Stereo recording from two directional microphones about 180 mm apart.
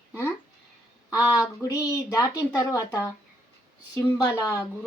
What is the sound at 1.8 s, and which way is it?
A woman's voice, 15° left (ahead or behind).